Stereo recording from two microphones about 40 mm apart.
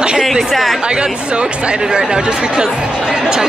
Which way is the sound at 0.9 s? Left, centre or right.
Right.